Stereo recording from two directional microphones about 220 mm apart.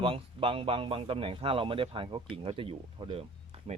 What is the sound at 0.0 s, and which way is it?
A man's voice, 25° right (ahead or behind).